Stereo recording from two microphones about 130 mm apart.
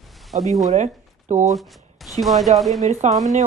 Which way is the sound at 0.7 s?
65° right (ahead or behind).